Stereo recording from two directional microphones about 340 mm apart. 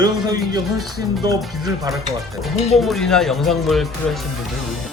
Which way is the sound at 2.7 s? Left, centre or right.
Centre.